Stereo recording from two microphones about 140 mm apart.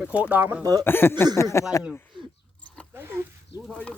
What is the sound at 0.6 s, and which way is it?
Speech, 25° right (ahead or behind).